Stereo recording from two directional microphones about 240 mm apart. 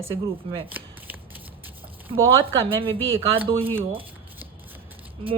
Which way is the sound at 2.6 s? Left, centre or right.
Right.